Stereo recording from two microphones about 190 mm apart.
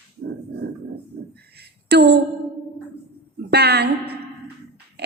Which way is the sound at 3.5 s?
60° right (ahead or behind).